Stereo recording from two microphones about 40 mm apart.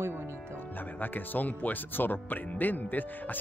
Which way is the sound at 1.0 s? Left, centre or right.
Left.